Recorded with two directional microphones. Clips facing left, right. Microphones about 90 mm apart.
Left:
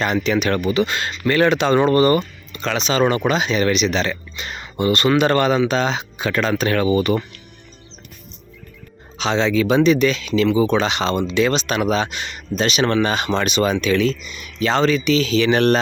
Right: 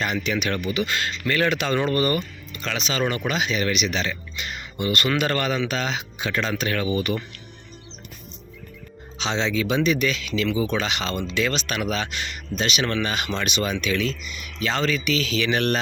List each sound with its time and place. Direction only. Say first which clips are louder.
0.0 s speech: left 6 dB; 40° left (ahead or behind)
0.9 s speech: left 4 dB; 25° left (ahead or behind)
6.2 s speech: left 6 dB; 55° left (ahead or behind)
6.6 s speech: left 7 dB; 40° left (ahead or behind)
9.1 s speech: left 6 dB; 50° left (ahead or behind); by 12.4 s 25° left (ahead or behind)
12.5 s speech: left 7 dB; 40° left (ahead or behind)